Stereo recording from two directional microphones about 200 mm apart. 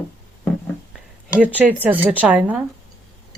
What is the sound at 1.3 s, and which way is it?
Speech, 10° right (ahead or behind).